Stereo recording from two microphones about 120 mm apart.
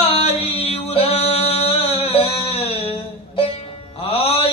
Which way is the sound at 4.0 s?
55° left (ahead or behind).